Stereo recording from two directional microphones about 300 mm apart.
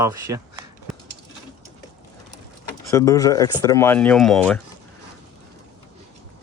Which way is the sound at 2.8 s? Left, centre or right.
Centre.